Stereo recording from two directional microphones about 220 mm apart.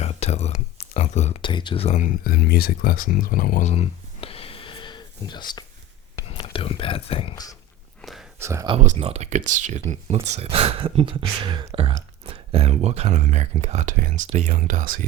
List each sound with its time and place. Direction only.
0.0 s speech: 30° left (ahead or behind)
8.0 s whispering: 5° left (ahead or behind)
8.4 s speech: 15° right (ahead or behind)
8.7 s speech: 30° right (ahead or behind)